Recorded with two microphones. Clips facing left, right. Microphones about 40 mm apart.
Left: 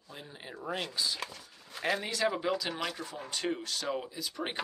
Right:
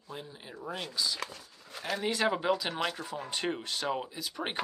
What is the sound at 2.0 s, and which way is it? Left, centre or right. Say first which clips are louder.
Speech: right 2 dB; right.